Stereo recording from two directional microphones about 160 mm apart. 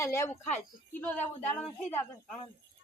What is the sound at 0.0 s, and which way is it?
A woman's voice, 15° left (ahead or behind).